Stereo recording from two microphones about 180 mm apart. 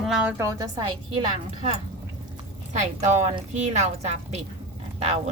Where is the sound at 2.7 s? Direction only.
40° right (ahead or behind).